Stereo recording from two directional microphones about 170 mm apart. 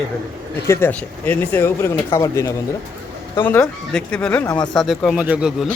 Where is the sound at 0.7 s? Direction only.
10° left (ahead or behind).